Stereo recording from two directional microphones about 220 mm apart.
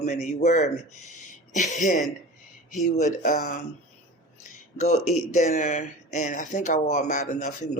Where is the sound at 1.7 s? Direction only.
35° left (ahead or behind).